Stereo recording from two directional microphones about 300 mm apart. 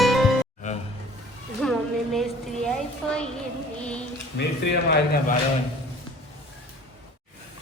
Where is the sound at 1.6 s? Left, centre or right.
Centre.